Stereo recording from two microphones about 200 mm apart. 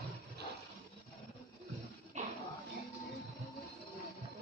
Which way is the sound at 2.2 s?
40° right (ahead or behind).